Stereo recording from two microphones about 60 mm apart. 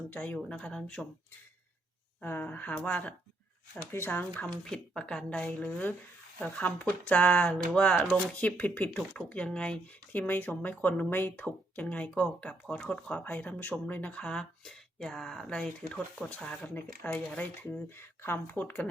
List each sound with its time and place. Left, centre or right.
0.4 s speech: centre
2.2 s speech: left
3.9 s speech: left
4.6 s speech: centre; by 8.9 s left
8.9 s speech: centre
10.1 s speech: left; by 13.1 s centre
13.1 s speech: left
14.3 s speech: centre; by 18.5 s left
18.5 s speech: left